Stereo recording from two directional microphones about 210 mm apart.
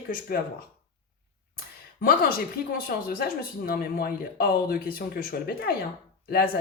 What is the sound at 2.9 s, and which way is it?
Speech, 45° left (ahead or behind).